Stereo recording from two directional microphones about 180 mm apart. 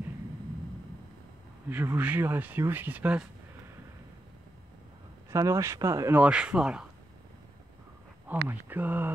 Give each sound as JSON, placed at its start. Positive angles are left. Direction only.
{"t": 1.7, "sound": "speech", "side_deg": -10}
{"t": 5.3, "sound": "speech", "side_deg": -15}
{"t": 8.3, "sound": "speech", "side_deg": -10}